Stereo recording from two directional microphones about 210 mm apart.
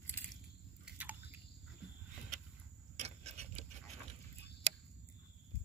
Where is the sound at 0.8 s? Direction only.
5° right (ahead or behind).